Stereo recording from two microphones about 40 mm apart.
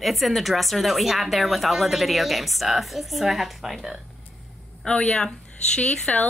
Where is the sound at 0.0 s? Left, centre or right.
Centre.